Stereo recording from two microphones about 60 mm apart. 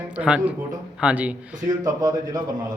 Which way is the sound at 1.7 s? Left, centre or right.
Right.